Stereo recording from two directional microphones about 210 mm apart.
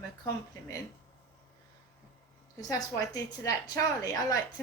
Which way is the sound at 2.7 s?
15° left (ahead or behind).